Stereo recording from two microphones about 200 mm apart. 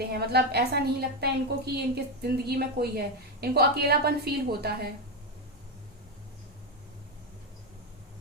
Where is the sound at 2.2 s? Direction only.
50° right (ahead or behind).